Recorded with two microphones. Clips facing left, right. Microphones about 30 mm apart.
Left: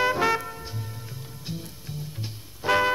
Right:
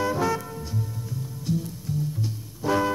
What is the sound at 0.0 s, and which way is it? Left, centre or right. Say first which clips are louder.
Music: left 2 dB; left.